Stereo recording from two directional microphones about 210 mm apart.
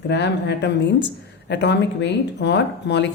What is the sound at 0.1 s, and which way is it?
Speech, 55° left (ahead or behind).